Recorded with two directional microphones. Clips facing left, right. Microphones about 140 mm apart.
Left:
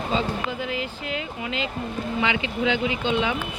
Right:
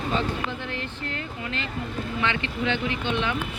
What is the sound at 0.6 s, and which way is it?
Speech, 10° left (ahead or behind).